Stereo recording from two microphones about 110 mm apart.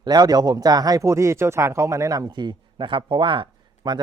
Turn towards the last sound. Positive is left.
turn(degrees=-45)  # may be behind; listen again after turning